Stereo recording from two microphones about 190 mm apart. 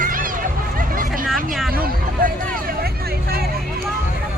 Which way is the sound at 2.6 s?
55° right (ahead or behind).